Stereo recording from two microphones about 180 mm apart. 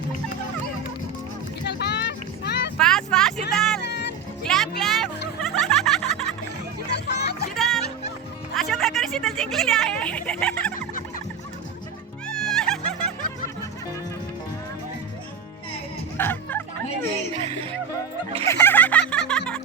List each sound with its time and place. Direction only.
1.6 s music: 70° left (ahead or behind)
2.7 s vehicle: 5° left (ahead or behind)
3.5 s music: centre (ahead or behind)
3.8 s music: 70° left (ahead or behind)
4.4 s music: centre (ahead or behind)
5.4 s turkey: centre (ahead or behind)
7.1 s music: 65° left (ahead or behind)
7.5 s music: centre (ahead or behind)
8.7 s speech: centre (ahead or behind)
12.3 s music: 5° left (ahead or behind)
16.1 s music: 10° left (ahead or behind)
18.4 s music: 15° left (ahead or behind)